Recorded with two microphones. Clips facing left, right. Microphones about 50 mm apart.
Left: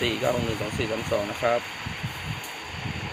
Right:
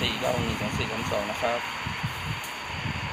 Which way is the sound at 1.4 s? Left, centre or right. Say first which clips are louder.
Left 5 dB; centre.